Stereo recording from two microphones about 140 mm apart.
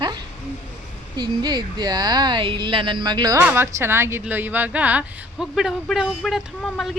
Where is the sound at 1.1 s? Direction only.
30° right (ahead or behind).